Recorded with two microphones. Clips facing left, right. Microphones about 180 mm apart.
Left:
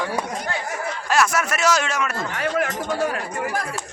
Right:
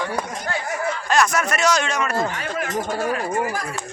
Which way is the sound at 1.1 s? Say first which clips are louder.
Even; 5° left (ahead or behind).